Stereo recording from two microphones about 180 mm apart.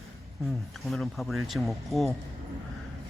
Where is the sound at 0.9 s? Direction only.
Centre (ahead or behind).